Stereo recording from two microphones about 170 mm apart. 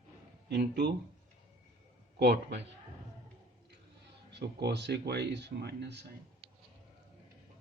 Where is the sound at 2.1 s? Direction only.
85° right.